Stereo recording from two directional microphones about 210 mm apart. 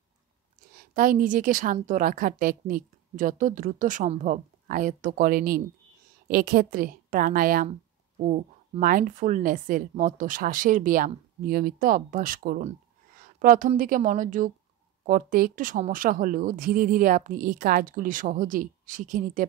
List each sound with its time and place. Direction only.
0.7 s a woman's voice: 40° right (ahead or behind)